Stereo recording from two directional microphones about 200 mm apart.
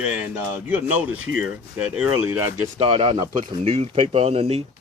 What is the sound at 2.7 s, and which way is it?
Speech, 25° right (ahead or behind).